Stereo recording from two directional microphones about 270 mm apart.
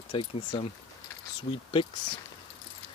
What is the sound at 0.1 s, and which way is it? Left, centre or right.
Speech, centre.